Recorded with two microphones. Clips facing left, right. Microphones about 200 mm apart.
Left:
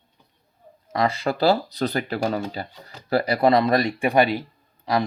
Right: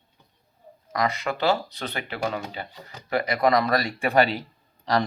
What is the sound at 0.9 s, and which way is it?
Speech, 30° left (ahead or behind).